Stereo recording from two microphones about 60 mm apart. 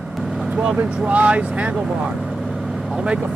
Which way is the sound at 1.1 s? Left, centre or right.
Right.